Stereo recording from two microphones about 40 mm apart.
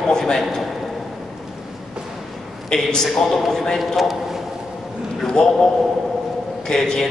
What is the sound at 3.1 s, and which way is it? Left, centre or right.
A man's voice, centre.